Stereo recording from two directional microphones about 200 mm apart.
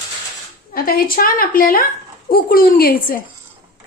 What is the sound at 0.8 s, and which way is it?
A woman's voice, 45° left (ahead or behind).